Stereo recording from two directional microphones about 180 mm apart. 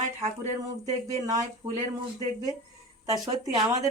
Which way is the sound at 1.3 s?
20° right (ahead or behind).